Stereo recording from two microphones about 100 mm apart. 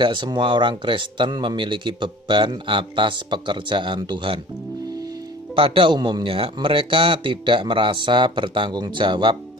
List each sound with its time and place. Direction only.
0.0 s speech: 55° right (ahead or behind)
5.6 s speech: 60° right (ahead or behind)